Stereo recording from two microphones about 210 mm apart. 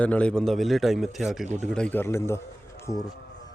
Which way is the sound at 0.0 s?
5° left (ahead or behind).